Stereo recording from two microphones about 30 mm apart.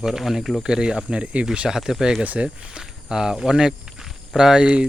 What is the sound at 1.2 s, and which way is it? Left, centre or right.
Speech, right.